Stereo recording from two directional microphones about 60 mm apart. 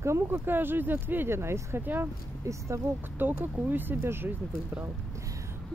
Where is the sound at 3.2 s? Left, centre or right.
Right.